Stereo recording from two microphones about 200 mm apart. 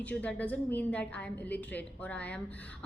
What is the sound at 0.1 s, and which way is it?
A woman's voice, 5° left (ahead or behind).